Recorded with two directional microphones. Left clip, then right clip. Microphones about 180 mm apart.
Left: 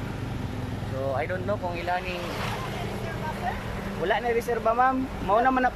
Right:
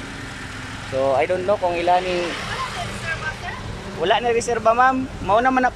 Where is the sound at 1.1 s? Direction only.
15° right (ahead or behind).